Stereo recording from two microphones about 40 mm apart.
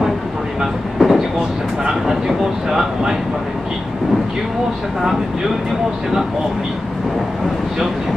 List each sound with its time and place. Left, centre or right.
0.6 s train: centre
1.9 s speech: centre